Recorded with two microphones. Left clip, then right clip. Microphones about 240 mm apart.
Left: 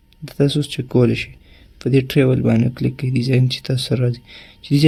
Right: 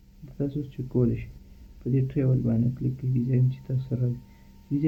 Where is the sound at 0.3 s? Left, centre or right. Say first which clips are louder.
Left 13 dB; left.